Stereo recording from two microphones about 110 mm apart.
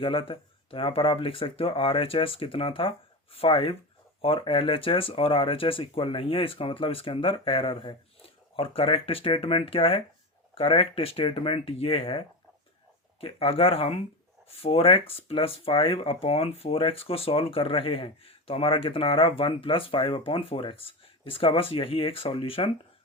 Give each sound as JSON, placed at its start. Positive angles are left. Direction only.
{"t": 0.0, "sound": "speech", "side_deg": 50}